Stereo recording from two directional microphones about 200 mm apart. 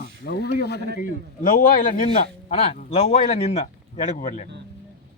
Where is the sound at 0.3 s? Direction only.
55° left (ahead or behind).